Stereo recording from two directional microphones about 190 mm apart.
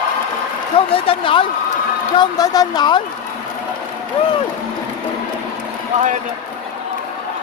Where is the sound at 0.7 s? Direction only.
30° left (ahead or behind).